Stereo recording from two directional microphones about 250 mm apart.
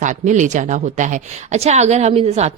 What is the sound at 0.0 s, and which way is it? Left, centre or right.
Speech, right.